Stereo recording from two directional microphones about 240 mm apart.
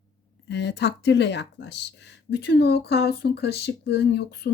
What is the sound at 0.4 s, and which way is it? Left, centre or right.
Speech, left.